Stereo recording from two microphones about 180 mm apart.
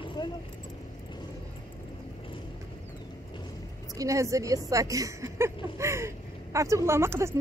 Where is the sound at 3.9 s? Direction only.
20° right (ahead or behind).